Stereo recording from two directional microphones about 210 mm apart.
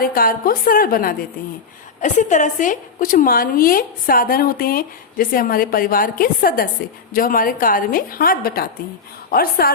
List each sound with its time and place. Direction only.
0.0 s a woman's voice: 45° left (ahead or behind)